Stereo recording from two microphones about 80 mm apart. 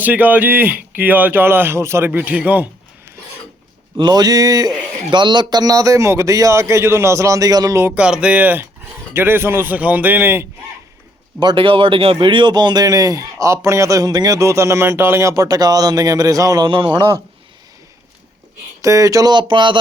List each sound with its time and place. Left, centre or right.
0.0 s speech: right
2.0 s speech: right
3.9 s a sound: right
5.1 s a man's voice: right
7.9 s speech: centre
11.3 s speech: right
14.3 s speech: right
16.6 s speech: right
18.8 s speech: right
19.3 s speech: right